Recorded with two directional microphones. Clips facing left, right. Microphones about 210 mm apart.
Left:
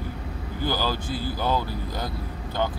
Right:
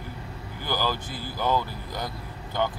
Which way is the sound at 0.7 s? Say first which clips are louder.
Left 1 dB; 20° right (ahead or behind).